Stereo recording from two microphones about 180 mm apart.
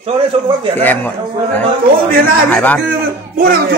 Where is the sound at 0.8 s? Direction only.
10° left (ahead or behind).